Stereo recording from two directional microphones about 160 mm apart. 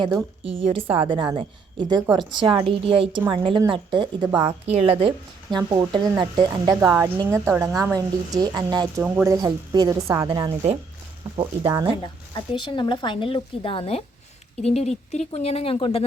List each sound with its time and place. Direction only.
0.4 s a woman's voice: 35° right (ahead or behind)
6.9 s speech: 15° right (ahead or behind)
11.6 s speech: 20° right (ahead or behind)
12.3 s a woman's voice: 30° left (ahead or behind)